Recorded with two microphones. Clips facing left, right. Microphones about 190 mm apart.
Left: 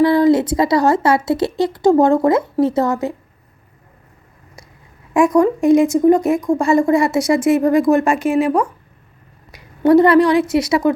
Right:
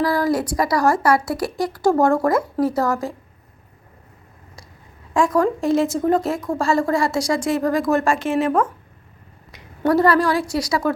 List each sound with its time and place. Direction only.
0.0 s speech: 20° left (ahead or behind)
5.1 s speech: 20° left (ahead or behind)
8.2 s speech: centre (ahead or behind)
9.8 s speech: 20° left (ahead or behind)